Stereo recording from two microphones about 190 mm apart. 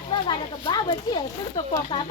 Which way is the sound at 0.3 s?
25° left (ahead or behind).